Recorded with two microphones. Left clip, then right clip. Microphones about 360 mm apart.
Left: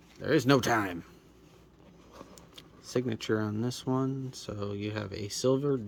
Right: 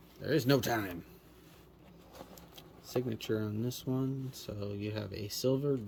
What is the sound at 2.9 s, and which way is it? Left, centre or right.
Speech, centre.